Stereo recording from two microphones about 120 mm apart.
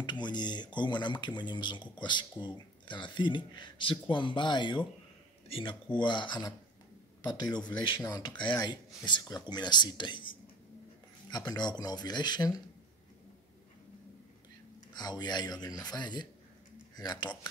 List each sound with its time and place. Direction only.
0.0 s speech: 40° left (ahead or behind)
11.2 s speech: 35° left (ahead or behind)
15.0 s speech: 35° left (ahead or behind)